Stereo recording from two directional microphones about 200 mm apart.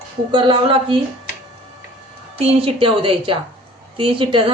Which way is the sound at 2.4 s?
30° right (ahead or behind).